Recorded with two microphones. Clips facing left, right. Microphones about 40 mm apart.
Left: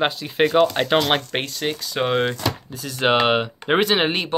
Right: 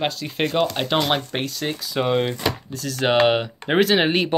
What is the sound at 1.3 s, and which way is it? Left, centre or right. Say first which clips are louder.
Speech: left 1 dB; left.